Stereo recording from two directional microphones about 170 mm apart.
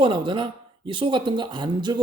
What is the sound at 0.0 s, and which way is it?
Speech, 30° right (ahead or behind).